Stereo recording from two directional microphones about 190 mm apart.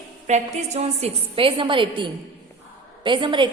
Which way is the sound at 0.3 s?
35° right (ahead or behind).